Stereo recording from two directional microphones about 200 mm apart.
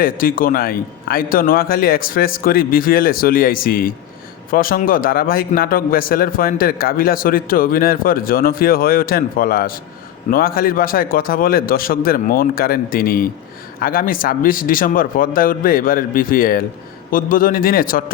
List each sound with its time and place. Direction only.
0.0 s a man's voice: 45° left (ahead or behind)